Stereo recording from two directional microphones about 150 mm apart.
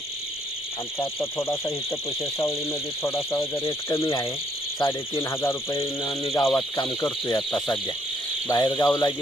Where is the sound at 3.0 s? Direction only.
20° left (ahead or behind).